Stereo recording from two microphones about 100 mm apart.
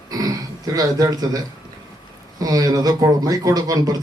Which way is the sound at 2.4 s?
40° right (ahead or behind).